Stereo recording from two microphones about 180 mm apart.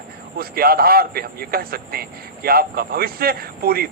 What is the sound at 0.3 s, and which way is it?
A man's voice, 55° right (ahead or behind).